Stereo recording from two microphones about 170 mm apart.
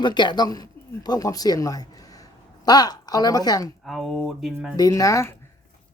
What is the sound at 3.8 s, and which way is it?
Speech, centre (ahead or behind).